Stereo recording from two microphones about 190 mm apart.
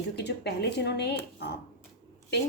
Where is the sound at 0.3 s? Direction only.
60° left (ahead or behind).